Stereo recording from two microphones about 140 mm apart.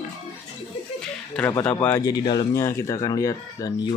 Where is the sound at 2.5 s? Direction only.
20° left (ahead or behind).